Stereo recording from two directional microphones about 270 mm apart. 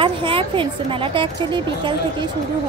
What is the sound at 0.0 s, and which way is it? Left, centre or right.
A woman's voice, centre.